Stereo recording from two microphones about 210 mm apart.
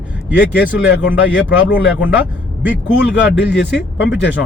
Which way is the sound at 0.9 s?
60° left (ahead or behind).